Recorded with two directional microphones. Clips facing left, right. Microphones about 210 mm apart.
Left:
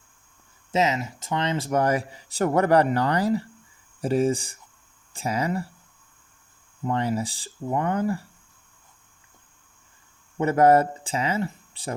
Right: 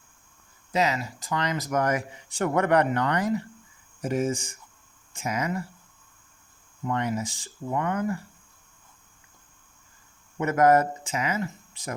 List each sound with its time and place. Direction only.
0.7 s speech: 20° left (ahead or behind)
6.8 s speech: 30° left (ahead or behind)
10.3 s speech: 30° left (ahead or behind)